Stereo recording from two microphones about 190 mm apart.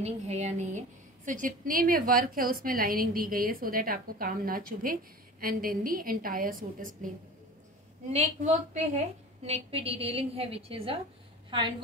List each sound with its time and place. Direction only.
0.0 s a woman's voice: 35° right (ahead or behind)
8.1 s a woman's voice: 35° right (ahead or behind)